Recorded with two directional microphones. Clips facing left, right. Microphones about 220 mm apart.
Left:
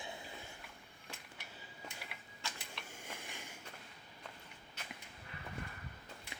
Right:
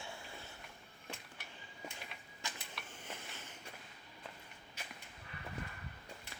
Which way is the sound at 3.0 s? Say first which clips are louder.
Even; 10° left (ahead or behind).